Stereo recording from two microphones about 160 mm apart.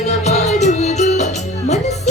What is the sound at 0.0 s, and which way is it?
Music, 45° left (ahead or behind).